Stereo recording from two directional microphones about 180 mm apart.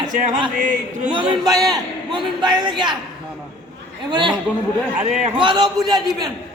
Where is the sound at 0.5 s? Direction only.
50° right (ahead or behind).